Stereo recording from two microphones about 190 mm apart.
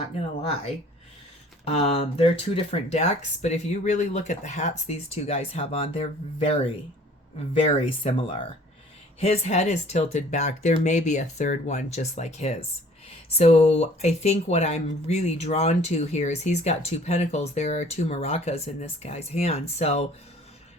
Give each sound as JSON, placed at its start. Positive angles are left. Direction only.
{"t": 1.6, "sound": "speech", "side_deg": 30}